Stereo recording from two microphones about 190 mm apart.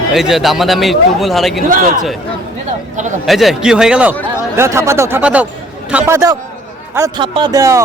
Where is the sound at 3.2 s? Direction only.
Centre (ahead or behind).